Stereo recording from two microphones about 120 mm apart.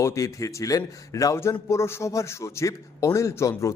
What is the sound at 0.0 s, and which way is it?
A man's voice, 25° left (ahead or behind).